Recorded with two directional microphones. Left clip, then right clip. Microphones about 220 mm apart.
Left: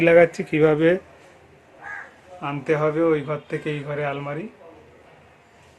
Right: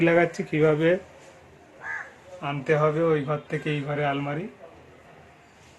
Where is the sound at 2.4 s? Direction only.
20° left (ahead or behind).